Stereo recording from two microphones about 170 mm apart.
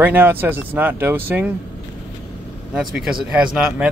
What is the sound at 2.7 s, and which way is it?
Speech, 5° right (ahead or behind).